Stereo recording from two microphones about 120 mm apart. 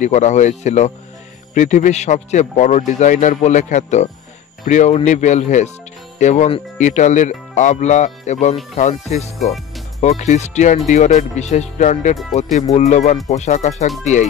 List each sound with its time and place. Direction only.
0.0 s speech: 75° left (ahead or behind)
1.5 s a man's voice: 90° left
12.5 s speech: 70° left (ahead or behind)